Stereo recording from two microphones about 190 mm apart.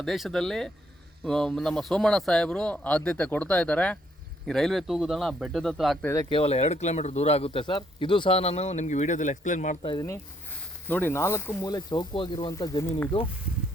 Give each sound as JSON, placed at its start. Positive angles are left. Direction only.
{"t": 0.0, "sound": "a man's voice", "side_deg": 0}
{"t": 6.3, "sound": "speech", "side_deg": 35}
{"t": 9.8, "sound": "speech", "side_deg": 20}